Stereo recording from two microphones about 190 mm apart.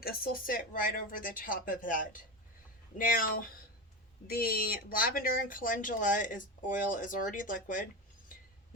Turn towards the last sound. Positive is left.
turn(degrees=45)  # may be behind; listen again after turning